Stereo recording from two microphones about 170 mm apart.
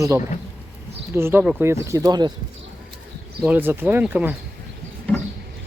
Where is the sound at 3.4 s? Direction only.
10° right (ahead or behind).